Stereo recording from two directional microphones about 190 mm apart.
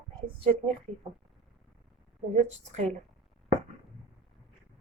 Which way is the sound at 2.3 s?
35° right (ahead or behind).